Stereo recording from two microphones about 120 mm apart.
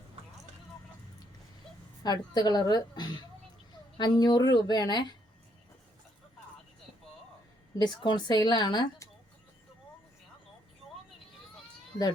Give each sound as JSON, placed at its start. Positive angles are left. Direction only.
{"t": 2.0, "sound": "a woman's voice", "side_deg": 35}
{"t": 7.8, "sound": "a woman's voice", "side_deg": 40}